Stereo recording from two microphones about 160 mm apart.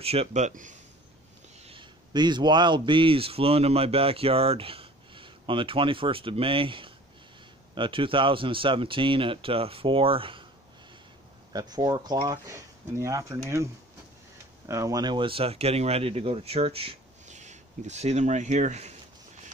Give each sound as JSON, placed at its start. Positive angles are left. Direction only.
{"t": 0.0, "sound": "speech", "side_deg": -40}
{"t": 1.7, "sound": "speech", "side_deg": -30}
{"t": 11.5, "sound": "speech", "side_deg": -25}
{"t": 14.7, "sound": "speech", "side_deg": -20}